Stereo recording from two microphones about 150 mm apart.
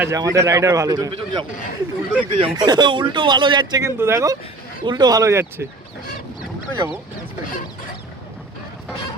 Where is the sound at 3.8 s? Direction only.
15° right (ahead or behind).